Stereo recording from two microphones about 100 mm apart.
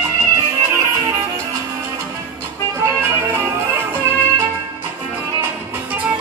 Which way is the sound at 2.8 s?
25° right (ahead or behind).